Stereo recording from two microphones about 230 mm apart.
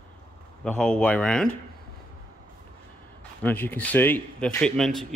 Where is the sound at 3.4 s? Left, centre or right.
Centre.